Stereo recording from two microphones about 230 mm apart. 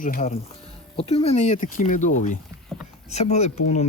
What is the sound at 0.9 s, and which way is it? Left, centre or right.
Speech, left.